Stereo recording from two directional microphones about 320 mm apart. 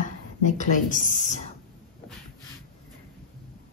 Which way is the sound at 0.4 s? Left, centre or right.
Left.